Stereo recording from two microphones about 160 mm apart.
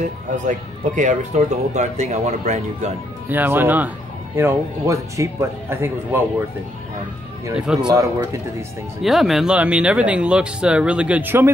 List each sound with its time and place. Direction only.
0.4 s speech: 50° right (ahead or behind)
3.3 s speech: 10° right (ahead or behind)
7.5 s speech: 5° right (ahead or behind)
7.8 s speech: 20° right (ahead or behind)
9.0 s speech: centre (ahead or behind)